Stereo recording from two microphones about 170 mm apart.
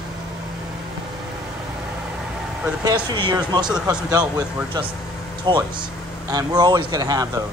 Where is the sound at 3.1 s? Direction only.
25° right (ahead or behind).